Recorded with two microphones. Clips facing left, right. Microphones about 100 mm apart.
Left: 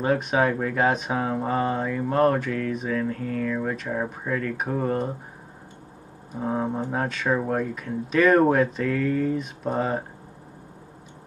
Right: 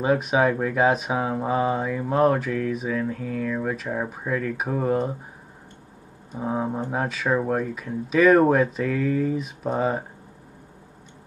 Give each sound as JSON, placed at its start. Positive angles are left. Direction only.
{"t": 0.0, "sound": "speech", "side_deg": -5}
{"t": 6.3, "sound": "speech", "side_deg": -5}